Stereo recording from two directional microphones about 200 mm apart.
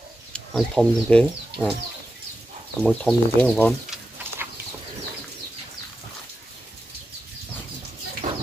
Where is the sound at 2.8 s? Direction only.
5° left (ahead or behind).